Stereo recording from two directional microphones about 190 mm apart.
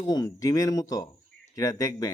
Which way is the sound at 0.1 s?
20° left (ahead or behind).